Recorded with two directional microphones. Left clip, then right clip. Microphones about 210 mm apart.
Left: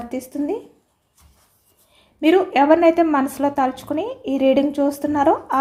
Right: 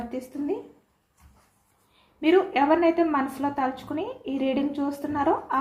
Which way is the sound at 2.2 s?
55° left (ahead or behind).